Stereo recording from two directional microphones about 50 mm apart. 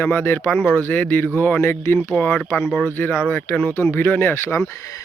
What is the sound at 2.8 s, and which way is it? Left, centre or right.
Speech, left.